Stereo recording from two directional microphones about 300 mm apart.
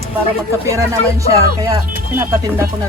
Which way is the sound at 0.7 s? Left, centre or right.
Centre.